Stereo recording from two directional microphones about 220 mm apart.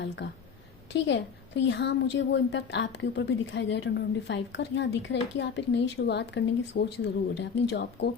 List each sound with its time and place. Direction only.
0.9 s a woman's voice: 55° left (ahead or behind)